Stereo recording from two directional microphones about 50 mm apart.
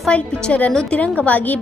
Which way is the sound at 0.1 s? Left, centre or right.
Left.